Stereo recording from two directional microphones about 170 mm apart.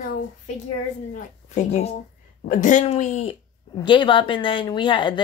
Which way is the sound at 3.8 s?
30° left (ahead or behind).